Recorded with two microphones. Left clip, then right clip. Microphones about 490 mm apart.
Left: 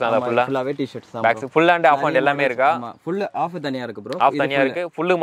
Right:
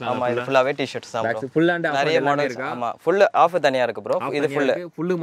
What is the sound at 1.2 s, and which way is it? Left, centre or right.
A man's voice, left.